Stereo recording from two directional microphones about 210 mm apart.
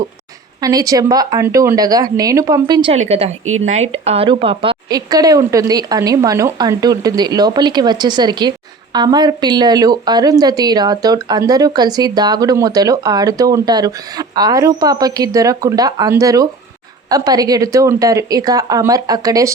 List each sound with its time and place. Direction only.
0.6 s a woman's voice: 15° right (ahead or behind)